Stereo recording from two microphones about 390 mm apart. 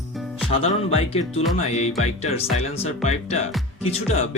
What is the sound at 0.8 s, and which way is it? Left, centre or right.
Music, centre.